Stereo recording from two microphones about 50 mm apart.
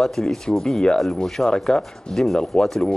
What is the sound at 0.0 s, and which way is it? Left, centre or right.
Speech, centre.